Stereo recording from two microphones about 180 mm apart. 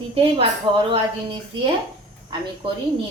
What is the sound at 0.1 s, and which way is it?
A woman's voice, 30° right (ahead or behind).